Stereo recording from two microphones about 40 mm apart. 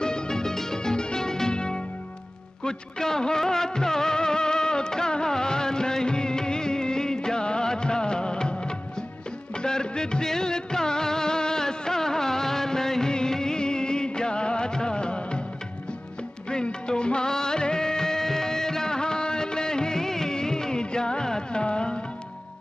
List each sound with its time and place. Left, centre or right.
0.0 s music: centre
2.6 s music of bollywood: centre
16.4 s music of bollywood: left